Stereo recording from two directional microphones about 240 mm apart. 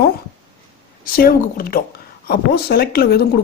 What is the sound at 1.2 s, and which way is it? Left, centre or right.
A woman's voice, left.